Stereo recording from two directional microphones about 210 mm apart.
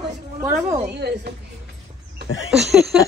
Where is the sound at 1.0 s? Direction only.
50° right (ahead or behind).